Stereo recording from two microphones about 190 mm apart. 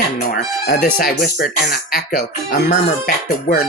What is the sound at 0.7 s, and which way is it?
Speech, 50° left (ahead or behind).